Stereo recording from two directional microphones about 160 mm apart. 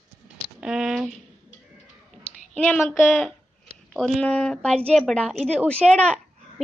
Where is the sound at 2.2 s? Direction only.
10° left (ahead or behind).